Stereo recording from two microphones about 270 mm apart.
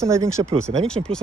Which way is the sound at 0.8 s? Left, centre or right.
Centre.